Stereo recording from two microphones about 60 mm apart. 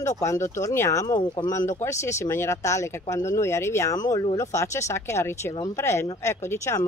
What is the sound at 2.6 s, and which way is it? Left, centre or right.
Speech, left.